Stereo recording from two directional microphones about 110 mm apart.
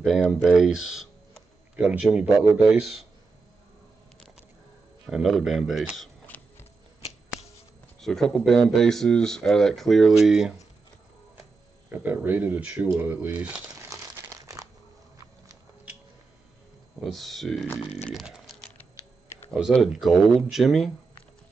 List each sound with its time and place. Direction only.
0.4 s a man's voice: 5° right (ahead or behind)
5.1 s speech: centre (ahead or behind)
6.3 s horse: 15° left (ahead or behind)
8.0 s speech: 5° left (ahead or behind)
11.9 s a man's voice: 15° right (ahead or behind)
13.7 s crumpling: 25° right (ahead or behind)
17.0 s speech: centre (ahead or behind)
18.1 s a sound: 5° right (ahead or behind)
19.7 s speech: centre (ahead or behind)